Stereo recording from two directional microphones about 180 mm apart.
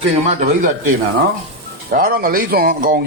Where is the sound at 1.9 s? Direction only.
55° right (ahead or behind).